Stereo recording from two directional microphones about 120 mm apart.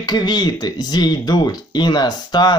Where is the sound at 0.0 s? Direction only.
35° left (ahead or behind).